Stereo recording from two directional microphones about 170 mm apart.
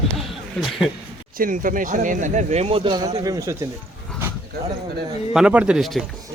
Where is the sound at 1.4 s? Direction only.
55° right (ahead or behind); by 3.5 s 20° right (ahead or behind).